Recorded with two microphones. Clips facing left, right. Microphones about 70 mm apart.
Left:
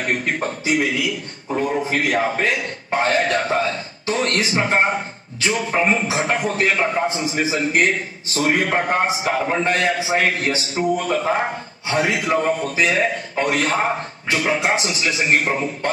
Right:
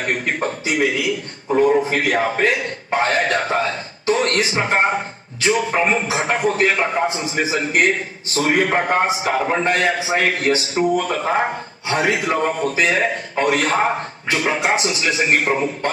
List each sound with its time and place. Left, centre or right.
0.0 s a man's voice: right